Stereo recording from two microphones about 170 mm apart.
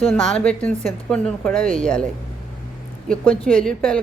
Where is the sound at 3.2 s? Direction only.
5° left (ahead or behind).